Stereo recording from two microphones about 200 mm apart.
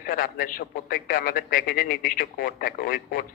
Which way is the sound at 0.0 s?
45° left (ahead or behind).